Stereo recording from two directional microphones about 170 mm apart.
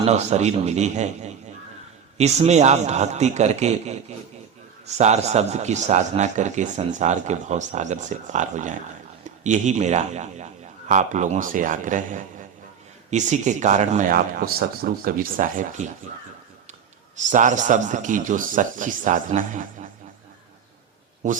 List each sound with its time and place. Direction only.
0.0 s a man's voice: 40° right (ahead or behind)
14.2 s speech: 60° right (ahead or behind)
17.2 s a man's voice: 45° right (ahead or behind)